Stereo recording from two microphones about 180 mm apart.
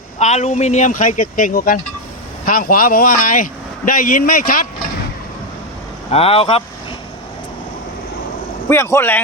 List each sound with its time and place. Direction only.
0.2 s speech: 40° left (ahead or behind)
6.1 s speech: 35° left (ahead or behind)
8.7 s speech: 15° left (ahead or behind)